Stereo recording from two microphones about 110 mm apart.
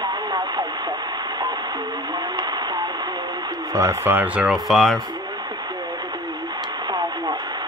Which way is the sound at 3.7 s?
30° right (ahead or behind).